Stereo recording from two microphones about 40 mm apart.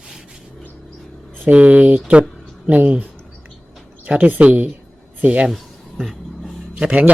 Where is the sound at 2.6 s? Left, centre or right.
Right.